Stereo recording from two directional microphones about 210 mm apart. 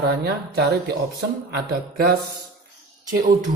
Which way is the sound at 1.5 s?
50° right (ahead or behind).